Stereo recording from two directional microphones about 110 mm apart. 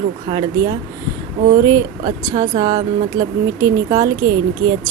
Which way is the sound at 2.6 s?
35° right (ahead or behind).